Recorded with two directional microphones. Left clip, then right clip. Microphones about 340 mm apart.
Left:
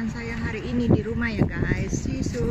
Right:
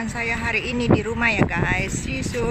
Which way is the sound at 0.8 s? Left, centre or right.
Right.